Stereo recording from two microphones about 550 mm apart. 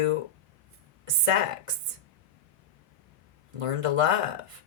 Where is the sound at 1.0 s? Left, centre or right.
Right.